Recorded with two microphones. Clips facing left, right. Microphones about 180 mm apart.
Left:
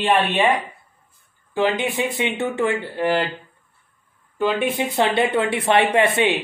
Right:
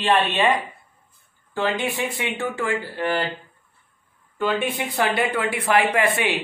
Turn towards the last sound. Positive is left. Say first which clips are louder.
# left 4 dB
turn(degrees=25)  # may be behind; listen again after turning